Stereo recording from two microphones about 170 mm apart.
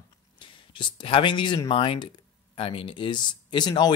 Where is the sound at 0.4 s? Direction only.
30° left (ahead or behind).